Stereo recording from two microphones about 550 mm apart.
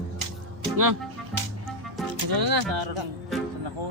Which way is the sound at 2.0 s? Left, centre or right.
Right.